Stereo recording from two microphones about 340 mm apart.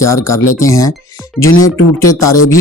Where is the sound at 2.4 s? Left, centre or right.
Left.